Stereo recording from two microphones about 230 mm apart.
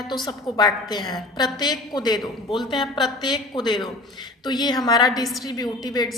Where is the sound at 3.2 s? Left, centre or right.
Centre.